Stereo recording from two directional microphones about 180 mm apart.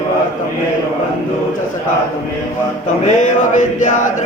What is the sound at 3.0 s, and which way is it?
Male singing, 45° left (ahead or behind).